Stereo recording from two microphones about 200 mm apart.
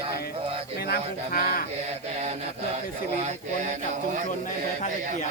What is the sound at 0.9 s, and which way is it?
Speech, 45° left (ahead or behind).